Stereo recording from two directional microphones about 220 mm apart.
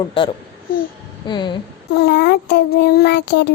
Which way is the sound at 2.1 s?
45° left (ahead or behind).